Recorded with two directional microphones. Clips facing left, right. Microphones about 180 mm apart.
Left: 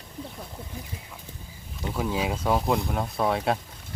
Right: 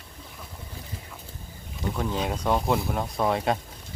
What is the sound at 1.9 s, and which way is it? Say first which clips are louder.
Speech: left 2 dB; 5° left (ahead or behind).